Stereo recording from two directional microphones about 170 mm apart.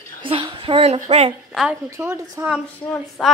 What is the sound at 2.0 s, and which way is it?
A woman's voice, 15° right (ahead or behind).